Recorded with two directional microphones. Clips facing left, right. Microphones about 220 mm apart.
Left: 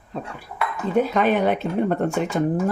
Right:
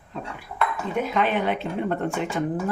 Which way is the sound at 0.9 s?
40° left (ahead or behind).